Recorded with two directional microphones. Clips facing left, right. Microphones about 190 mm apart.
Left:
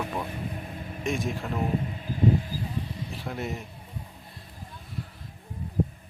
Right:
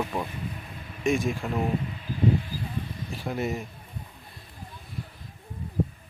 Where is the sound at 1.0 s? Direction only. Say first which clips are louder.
Right 4 dB; centre (ahead or behind).